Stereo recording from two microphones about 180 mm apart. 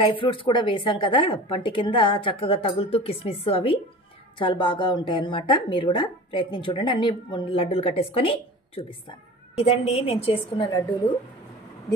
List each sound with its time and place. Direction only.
0.0 s a woman's voice: 30° left (ahead or behind)